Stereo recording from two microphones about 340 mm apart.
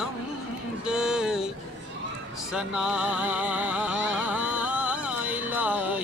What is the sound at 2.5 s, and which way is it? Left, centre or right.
Music, centre.